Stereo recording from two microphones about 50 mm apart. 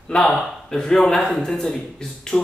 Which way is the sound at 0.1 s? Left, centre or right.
Left.